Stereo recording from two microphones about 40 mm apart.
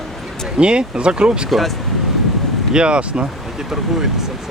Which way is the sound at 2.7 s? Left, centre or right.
Right.